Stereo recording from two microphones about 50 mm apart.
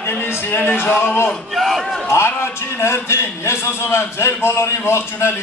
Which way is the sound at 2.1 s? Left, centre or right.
Left.